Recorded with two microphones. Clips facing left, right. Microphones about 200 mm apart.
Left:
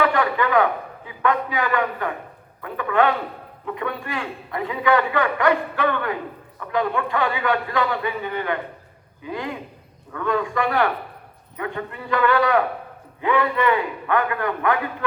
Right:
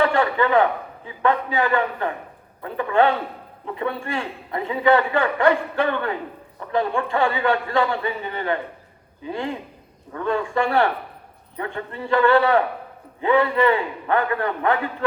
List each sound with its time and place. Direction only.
0.0 s a sound: 25° right (ahead or behind)
1.0 s a man's voice: 30° right (ahead or behind)
10.1 s a man's voice: 30° right (ahead or behind)